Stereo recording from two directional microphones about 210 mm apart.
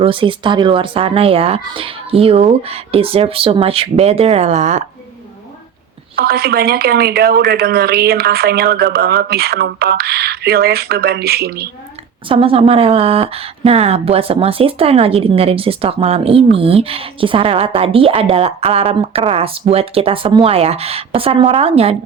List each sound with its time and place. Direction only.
0.0 s speech: 25° right (ahead or behind)
6.1 s a woman's voice: 45° right (ahead or behind)
12.3 s speech: 25° right (ahead or behind)